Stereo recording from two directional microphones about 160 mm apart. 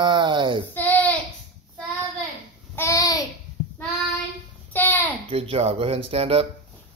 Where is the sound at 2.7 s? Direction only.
20° left (ahead or behind).